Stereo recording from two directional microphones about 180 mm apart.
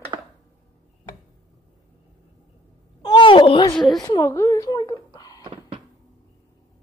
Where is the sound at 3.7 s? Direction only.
Centre (ahead or behind).